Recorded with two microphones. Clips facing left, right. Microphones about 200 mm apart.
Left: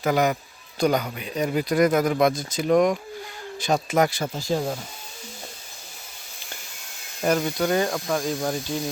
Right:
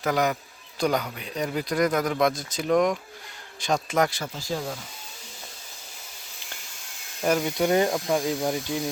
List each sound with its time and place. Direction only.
0.0 s speech: 5° left (ahead or behind)
4.2 s speech: 25° left (ahead or behind)
7.2 s speech: 5° right (ahead or behind)
7.4 s speech: 20° right (ahead or behind)